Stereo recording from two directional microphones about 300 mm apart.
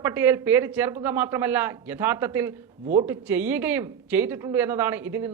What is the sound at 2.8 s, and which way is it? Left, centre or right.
Speech, right.